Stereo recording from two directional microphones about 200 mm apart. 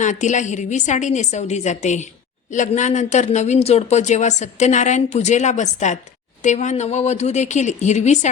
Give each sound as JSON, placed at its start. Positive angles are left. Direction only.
{"t": 0.0, "sound": "speech", "side_deg": 35}